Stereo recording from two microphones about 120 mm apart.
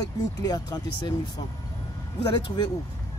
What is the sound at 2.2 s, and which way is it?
Speech, 40° left (ahead or behind).